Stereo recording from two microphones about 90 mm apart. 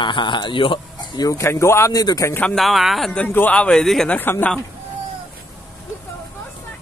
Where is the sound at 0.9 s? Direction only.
50° left (ahead or behind).